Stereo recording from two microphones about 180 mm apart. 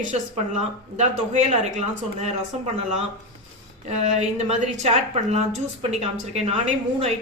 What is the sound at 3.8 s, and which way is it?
A woman's voice, 35° right (ahead or behind).